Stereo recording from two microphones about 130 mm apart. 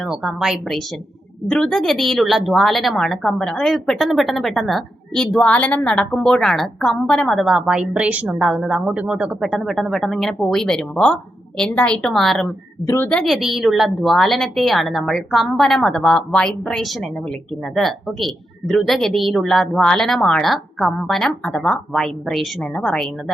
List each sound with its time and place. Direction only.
0.0 s a woman's voice: 5° right (ahead or behind)
12.8 s speech: 20° left (ahead or behind)
13.1 s a woman's voice: 5° left (ahead or behind)